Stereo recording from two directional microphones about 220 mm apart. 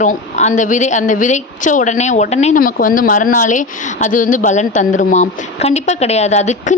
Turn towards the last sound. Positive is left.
turn(degrees=30)  # may be behind; listen again after turning